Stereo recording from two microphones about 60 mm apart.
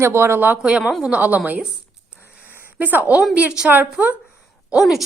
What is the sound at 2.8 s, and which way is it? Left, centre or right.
A woman's voice, right.